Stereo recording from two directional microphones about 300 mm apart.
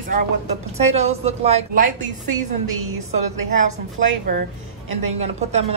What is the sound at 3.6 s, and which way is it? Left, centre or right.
A woman's voice, right.